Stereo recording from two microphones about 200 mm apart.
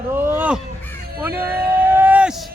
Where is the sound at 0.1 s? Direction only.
10° right (ahead or behind).